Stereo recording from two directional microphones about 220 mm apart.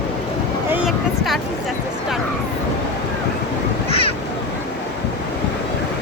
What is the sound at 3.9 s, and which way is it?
Waves, 25° left (ahead or behind).